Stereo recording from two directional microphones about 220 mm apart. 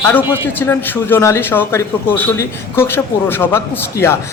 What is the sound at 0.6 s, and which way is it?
A man's voice, 10° left (ahead or behind).